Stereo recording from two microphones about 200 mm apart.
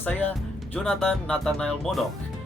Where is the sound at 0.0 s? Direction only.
10° left (ahead or behind).